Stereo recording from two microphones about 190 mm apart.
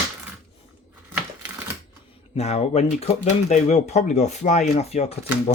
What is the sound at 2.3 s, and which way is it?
Speech, 35° left (ahead or behind).